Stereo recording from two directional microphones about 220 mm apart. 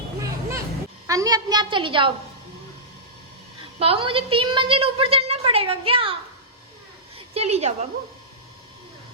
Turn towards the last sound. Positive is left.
turn(degrees=-30)  # may be behind; listen again after turning